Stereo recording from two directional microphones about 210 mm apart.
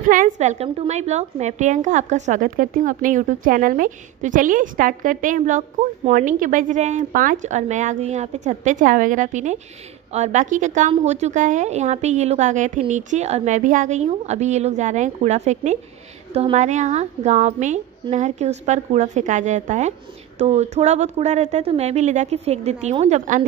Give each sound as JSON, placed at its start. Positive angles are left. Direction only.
{"t": 0.1, "sound": "a woman's voice", "side_deg": -35}